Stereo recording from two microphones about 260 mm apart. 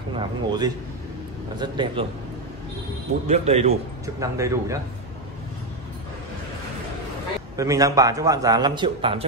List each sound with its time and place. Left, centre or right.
0.1 s a man's voice: centre
3.3 s speech: right
4.0 s a man's voice: centre
7.5 s a man's voice: centre